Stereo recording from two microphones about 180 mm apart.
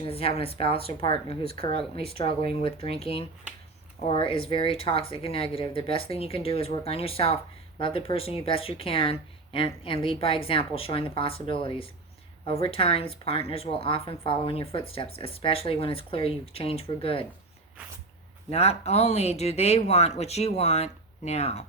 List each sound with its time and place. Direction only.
0.0 s a woman's voice: 30° left (ahead or behind)
18.5 s a woman's voice: 35° left (ahead or behind)